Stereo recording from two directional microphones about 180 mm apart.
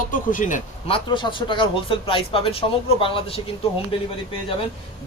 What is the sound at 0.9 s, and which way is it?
A man's voice, 25° left (ahead or behind).